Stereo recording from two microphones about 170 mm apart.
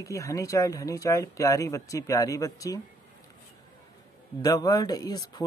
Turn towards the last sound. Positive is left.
turn(degrees=25)  # may be behind; listen again after turning